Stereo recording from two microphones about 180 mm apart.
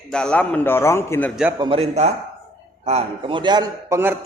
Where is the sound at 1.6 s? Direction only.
30° right (ahead or behind).